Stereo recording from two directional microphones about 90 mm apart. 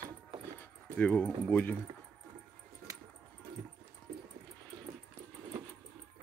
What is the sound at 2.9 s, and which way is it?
Music, 40° right (ahead or behind).